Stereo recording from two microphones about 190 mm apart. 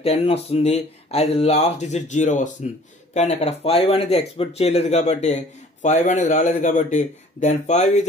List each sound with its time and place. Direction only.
0.0 s speech: 30° left (ahead or behind)